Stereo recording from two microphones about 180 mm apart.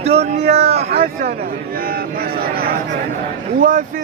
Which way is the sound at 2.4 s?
55° right (ahead or behind).